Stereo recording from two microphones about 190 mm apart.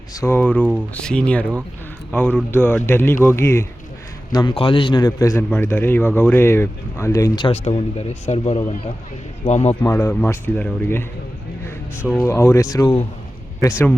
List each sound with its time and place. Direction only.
0.1 s a man's voice: 15° left (ahead or behind)
2.5 s a man's voice: 10° left (ahead or behind); by 9.7 s 35° left (ahead or behind)
9.8 s a man's voice: 15° left (ahead or behind)
12.0 s a man's voice: 10° left (ahead or behind)